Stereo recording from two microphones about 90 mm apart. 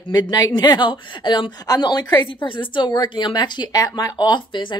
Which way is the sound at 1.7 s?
50° left (ahead or behind).